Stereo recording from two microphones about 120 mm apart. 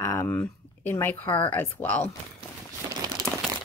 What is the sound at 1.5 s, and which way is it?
Speech, 15° left (ahead or behind).